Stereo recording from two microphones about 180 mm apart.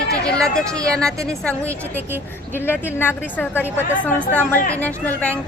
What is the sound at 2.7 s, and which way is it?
Speech, 10° left (ahead or behind).